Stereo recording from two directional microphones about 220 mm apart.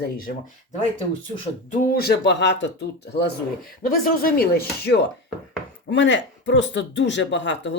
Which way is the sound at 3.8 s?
40° left (ahead or behind).